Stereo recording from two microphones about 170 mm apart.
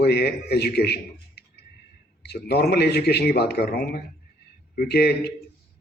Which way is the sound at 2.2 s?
75° left (ahead or behind).